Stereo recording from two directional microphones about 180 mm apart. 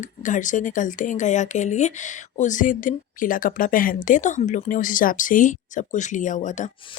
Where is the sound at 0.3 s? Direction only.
45° left (ahead or behind).